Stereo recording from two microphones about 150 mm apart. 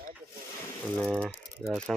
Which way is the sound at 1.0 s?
Centre (ahead or behind).